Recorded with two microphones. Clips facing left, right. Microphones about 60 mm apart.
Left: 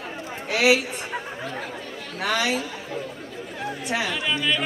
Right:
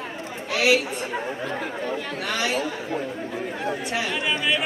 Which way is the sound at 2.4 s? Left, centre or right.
Right.